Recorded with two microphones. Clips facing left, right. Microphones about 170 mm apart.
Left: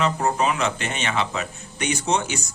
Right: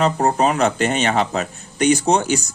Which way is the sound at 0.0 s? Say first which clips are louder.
Right 5 dB; 40° right (ahead or behind).